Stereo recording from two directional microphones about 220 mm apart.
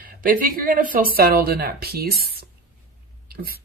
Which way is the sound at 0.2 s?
40° right (ahead or behind).